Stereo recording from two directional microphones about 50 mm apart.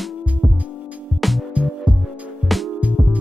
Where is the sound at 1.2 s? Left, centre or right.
Centre.